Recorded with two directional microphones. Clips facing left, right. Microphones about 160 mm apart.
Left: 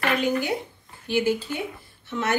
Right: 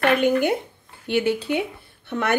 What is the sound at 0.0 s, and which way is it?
A woman's voice, 55° right (ahead or behind).